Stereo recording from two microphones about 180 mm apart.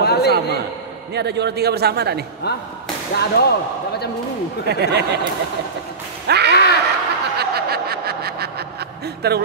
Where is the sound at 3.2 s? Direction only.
65° left (ahead or behind).